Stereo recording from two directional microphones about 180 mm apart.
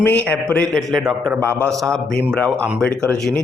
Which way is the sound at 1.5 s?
15° right (ahead or behind).